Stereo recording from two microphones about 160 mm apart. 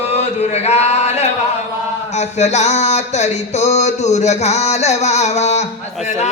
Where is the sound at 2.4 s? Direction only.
45° left (ahead or behind).